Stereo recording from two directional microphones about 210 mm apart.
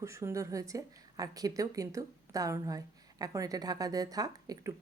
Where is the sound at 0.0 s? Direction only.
15° right (ahead or behind).